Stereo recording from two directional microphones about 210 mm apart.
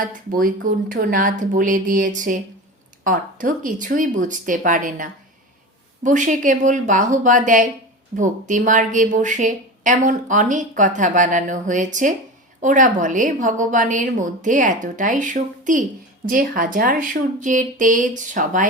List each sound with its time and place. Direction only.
0.0 s a woman's voice: 40° right (ahead or behind)